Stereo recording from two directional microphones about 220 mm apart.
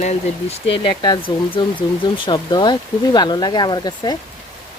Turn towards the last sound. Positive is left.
turn(degrees=20)  # may be behind; listen again after turning